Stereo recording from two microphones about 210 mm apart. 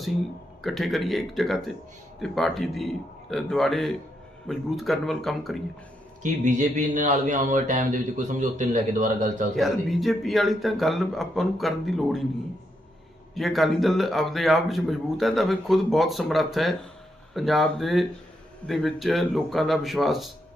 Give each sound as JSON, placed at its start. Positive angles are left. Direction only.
{"t": 0.6, "sound": "speech", "side_deg": 0}
{"t": 6.2, "sound": "a man's voice", "side_deg": -35}
{"t": 9.6, "sound": "speech", "side_deg": 0}
{"t": 13.3, "sound": "speech", "side_deg": 0}